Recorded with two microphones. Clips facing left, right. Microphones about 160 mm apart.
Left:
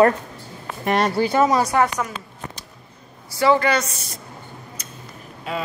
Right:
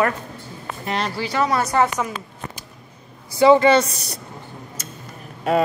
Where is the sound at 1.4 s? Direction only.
15° left (ahead or behind).